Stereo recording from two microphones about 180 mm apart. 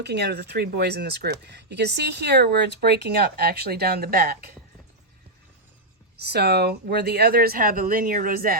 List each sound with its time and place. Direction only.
0.0 s speech: 65° right (ahead or behind)
6.2 s speech: 65° right (ahead or behind)